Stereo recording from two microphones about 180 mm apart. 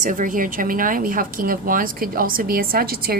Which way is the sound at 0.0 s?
45° right (ahead or behind).